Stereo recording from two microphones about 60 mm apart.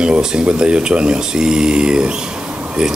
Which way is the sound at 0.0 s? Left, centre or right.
Centre.